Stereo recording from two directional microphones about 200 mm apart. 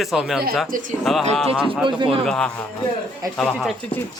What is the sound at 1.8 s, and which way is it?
Speech, 25° right (ahead or behind).